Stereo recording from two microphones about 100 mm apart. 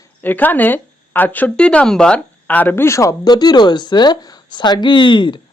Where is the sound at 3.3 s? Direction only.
45° left (ahead or behind).